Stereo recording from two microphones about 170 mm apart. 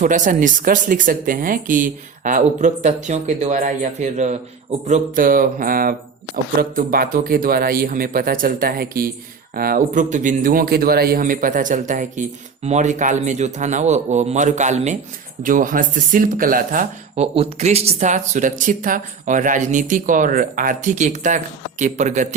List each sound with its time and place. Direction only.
0.0 s speech: 50° right (ahead or behind)
17.2 s speech: 35° right (ahead or behind)